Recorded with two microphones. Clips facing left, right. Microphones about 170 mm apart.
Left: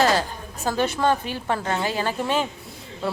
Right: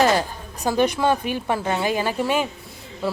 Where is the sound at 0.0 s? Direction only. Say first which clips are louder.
Right 2 dB; 15° right (ahead or behind).